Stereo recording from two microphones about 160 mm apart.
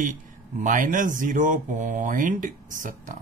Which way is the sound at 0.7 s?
55° right (ahead or behind).